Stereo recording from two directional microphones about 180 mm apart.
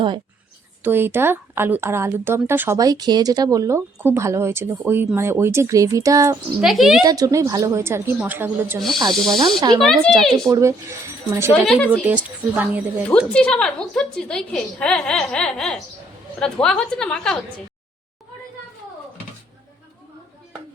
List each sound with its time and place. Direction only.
0.9 s speech: 10° right (ahead or behind)
6.6 s a woman's voice: centre (ahead or behind)
7.0 s speech: 20° right (ahead or behind)
9.1 s a woman's voice: centre (ahead or behind)
9.6 s speech: 25° right (ahead or behind)
9.8 s a woman's voice: centre (ahead or behind)
10.5 s speech: 15° right (ahead or behind)
11.5 s a woman's voice: 5° left (ahead or behind)
11.9 s speech: 10° right (ahead or behind)
13.1 s a woman's voice: 10° left (ahead or behind)